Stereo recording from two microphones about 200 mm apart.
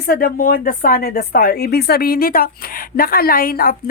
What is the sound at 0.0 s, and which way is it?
Speech, 50° left (ahead or behind).